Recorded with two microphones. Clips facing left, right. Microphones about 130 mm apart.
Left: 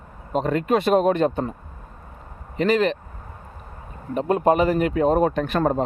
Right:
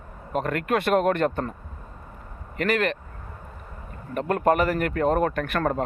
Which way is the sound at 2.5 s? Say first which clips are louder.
Left 4 dB; 20° left (ahead or behind).